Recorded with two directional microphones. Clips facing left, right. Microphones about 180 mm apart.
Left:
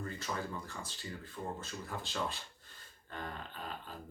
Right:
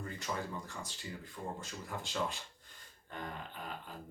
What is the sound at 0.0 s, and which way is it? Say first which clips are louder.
Speech: even; 15° right (ahead or behind).